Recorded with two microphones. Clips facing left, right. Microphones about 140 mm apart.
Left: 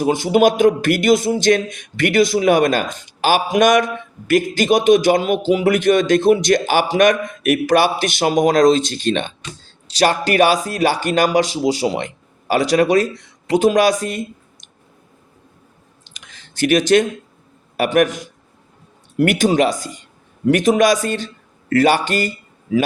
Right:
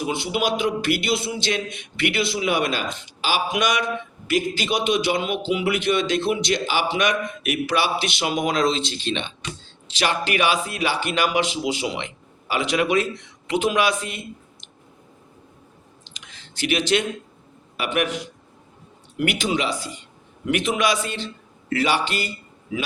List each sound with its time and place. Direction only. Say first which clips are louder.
0.0 s a man's voice: left 10 dB; 45° left (ahead or behind)
16.0 s a sound: left 3 dB; 50° left (ahead or behind)
17.7 s a man's voice: left 8 dB; 45° left (ahead or behind)